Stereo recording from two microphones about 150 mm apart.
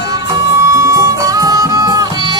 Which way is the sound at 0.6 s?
20° right (ahead or behind).